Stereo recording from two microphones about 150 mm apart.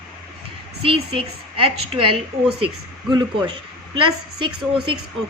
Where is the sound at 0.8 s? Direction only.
35° right (ahead or behind).